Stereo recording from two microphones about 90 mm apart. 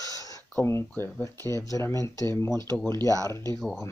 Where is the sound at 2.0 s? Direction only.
45° right (ahead or behind).